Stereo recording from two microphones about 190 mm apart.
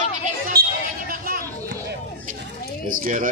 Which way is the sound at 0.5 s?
55° right (ahead or behind).